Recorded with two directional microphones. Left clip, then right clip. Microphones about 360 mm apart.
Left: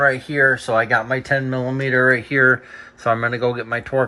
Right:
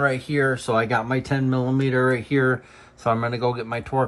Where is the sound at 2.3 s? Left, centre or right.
Right.